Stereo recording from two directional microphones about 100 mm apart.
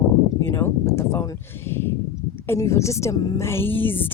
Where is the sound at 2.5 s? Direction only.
30° left (ahead or behind).